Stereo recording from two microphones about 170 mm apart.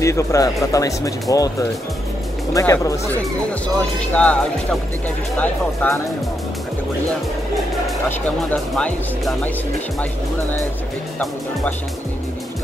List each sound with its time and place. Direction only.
0.0 s speech: 15° left (ahead or behind)
3.6 s speech: 5° left (ahead or behind)
5.4 s speech: 10° left (ahead or behind)
8.7 s speech: centre (ahead or behind)